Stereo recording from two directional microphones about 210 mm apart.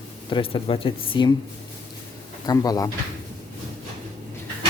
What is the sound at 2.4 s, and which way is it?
Speech, 15° left (ahead or behind).